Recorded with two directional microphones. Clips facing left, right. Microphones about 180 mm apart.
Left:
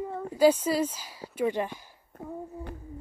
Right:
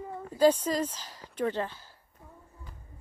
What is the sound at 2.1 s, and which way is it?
Speech, 65° left (ahead or behind).